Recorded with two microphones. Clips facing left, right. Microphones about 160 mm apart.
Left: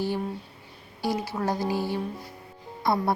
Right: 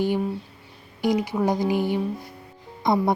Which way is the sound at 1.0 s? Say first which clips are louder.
Right 6 dB; 15° right (ahead or behind).